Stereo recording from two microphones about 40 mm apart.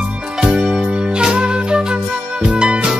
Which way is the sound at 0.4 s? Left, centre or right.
Centre.